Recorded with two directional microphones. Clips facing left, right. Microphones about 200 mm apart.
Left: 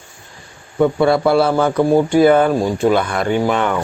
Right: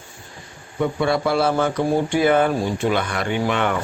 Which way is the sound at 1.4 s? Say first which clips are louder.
Left 5 dB; 35° left (ahead or behind).